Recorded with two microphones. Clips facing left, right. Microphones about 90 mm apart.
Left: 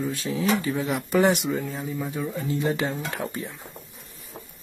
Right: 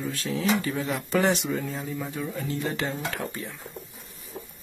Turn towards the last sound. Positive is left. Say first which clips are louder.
# left 1 dB
turn(degrees=20)  # may be behind; listen again after turning